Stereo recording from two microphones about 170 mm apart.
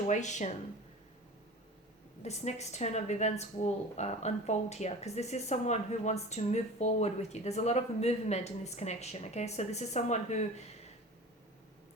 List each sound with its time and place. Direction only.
0.1 s speech: 45° left (ahead or behind)
2.2 s a woman's voice: 40° left (ahead or behind)